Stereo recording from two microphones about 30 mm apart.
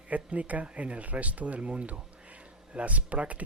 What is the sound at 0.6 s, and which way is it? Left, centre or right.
Speech, right.